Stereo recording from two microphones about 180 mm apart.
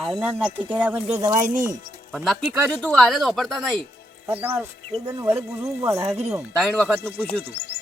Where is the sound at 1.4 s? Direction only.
45° right (ahead or behind).